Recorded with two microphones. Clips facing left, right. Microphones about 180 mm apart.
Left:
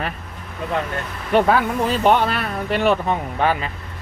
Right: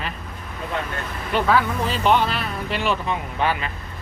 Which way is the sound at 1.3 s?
50° left (ahead or behind).